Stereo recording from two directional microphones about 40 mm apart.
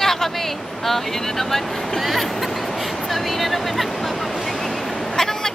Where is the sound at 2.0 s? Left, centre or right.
Centre.